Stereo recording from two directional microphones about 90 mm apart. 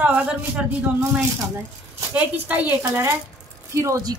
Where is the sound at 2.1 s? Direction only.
20° right (ahead or behind).